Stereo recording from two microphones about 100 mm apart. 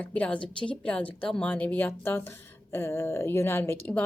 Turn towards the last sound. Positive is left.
turn(degrees=20)  # may be behind; listen again after turning